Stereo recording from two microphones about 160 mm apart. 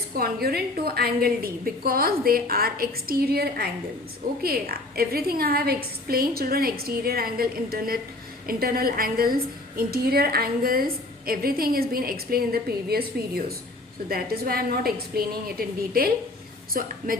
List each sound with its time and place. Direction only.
0.2 s a woman's voice: 75° right (ahead or behind)